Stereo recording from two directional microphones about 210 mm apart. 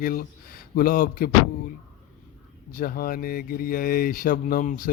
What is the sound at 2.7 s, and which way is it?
Speech, 45° left (ahead or behind).